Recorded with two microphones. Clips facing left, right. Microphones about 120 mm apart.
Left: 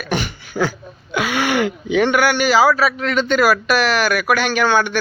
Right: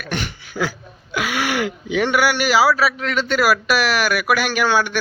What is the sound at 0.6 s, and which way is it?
Speech, 25° left (ahead or behind).